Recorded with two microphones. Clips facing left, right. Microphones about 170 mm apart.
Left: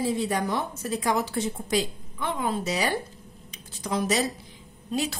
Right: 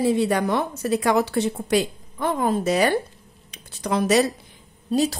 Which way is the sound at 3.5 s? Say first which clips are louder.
Right 5 dB; 65° right (ahead or behind).